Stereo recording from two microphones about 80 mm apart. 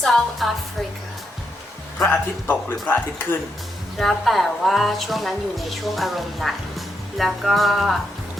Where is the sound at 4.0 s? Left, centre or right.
Centre.